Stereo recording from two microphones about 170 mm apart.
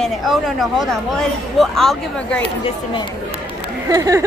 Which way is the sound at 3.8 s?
20° right (ahead or behind).